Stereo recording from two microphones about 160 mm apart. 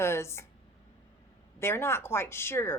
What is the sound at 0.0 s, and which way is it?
Speech, 15° left (ahead or behind).